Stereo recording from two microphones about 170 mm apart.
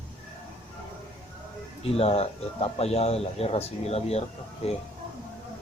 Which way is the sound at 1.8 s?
35° left (ahead or behind).